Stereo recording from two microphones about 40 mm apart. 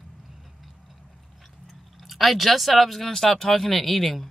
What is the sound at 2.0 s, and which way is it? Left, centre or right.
Speech, centre.